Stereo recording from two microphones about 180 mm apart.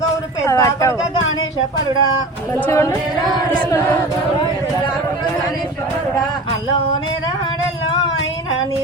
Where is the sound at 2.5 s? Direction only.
15° left (ahead or behind).